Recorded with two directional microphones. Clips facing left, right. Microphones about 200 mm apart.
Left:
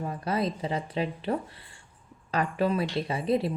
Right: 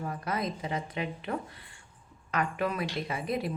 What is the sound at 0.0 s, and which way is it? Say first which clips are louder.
Speech: left 4 dB; 30° left (ahead or behind).